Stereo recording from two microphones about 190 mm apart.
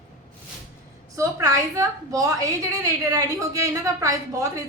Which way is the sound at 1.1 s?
15° right (ahead or behind).